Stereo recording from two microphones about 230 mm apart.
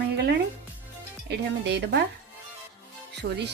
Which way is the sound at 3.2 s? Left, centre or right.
Right.